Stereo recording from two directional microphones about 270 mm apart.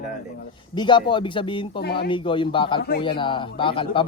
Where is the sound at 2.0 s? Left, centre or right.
Centre.